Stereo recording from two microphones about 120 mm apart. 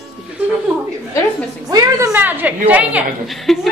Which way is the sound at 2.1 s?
15° right (ahead or behind).